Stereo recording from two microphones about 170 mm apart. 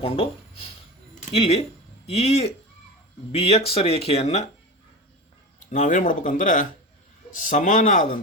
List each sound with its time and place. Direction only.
0.0 s speech: 35° left (ahead or behind)
5.7 s speech: 45° left (ahead or behind)